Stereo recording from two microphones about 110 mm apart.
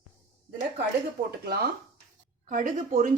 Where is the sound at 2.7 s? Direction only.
90° right.